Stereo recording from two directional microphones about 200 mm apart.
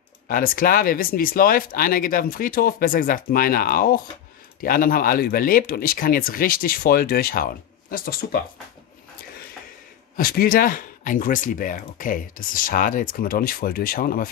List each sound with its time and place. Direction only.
0.3 s speech: 45° left (ahead or behind)
10.1 s speech: 45° left (ahead or behind)